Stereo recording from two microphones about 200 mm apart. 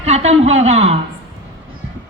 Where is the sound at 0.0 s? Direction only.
30° right (ahead or behind).